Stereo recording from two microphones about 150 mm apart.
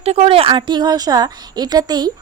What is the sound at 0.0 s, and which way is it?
A woman's voice, 40° right (ahead or behind).